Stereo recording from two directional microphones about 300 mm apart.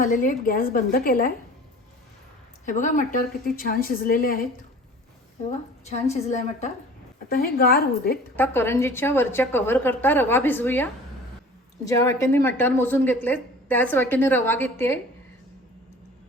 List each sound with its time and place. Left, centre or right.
0.0 s a woman's voice: left
2.6 s a woman's voice: left
5.5 s a woman's voice: left
8.4 s a woman's voice: centre
11.9 s a woman's voice: centre